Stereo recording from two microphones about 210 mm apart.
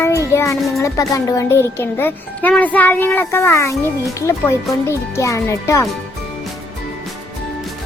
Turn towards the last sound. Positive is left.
turn(degrees=15)  # may be behind; listen again after turning